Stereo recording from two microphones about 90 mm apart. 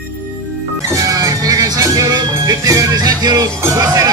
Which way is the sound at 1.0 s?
40° right (ahead or behind).